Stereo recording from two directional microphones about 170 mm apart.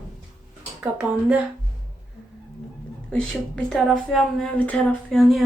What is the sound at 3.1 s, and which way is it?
A woman's voice, 5° left (ahead or behind).